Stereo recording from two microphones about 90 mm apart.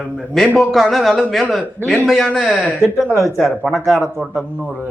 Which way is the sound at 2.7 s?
Centre (ahead or behind).